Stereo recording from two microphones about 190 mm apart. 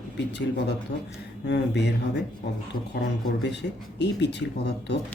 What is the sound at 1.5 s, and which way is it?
Speech, 65° left (ahead or behind).